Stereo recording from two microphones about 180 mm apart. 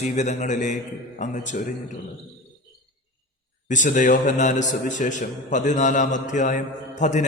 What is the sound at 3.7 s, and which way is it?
A man's voice, 45° left (ahead or behind).